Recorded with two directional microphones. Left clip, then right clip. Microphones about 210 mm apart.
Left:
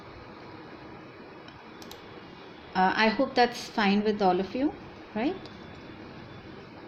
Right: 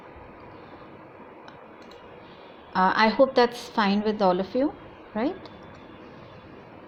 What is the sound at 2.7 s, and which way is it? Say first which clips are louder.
A woman's voice: right 4 dB; 15° right (ahead or behind).